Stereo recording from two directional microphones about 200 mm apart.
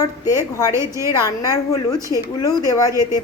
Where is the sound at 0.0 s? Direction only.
15° left (ahead or behind).